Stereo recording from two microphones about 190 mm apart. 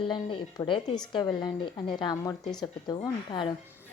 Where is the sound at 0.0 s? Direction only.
25° left (ahead or behind).